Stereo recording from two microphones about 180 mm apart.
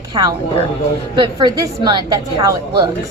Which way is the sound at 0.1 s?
20° right (ahead or behind).